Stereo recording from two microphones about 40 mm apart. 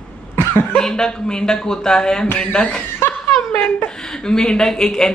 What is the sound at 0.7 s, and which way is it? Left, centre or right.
Speech, centre.